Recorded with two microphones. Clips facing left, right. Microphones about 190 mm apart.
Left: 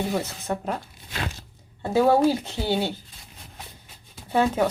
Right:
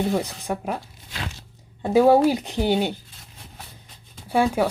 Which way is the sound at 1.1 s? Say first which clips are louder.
Left 2 dB; 50° left (ahead or behind).